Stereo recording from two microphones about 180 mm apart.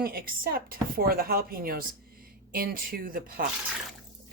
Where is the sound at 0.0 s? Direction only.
55° right (ahead or behind).